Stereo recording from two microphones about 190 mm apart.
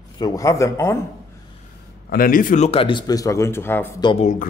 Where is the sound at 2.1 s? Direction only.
50° left (ahead or behind); by 4.0 s 10° left (ahead or behind).